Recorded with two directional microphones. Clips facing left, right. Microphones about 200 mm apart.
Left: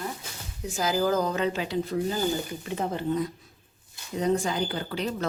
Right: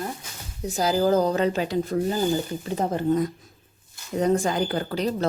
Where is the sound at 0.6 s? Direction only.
35° right (ahead or behind).